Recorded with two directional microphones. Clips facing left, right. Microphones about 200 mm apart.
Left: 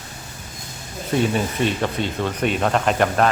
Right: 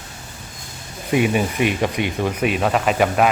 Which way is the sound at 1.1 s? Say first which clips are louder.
Right 2 dB; 10° right (ahead or behind).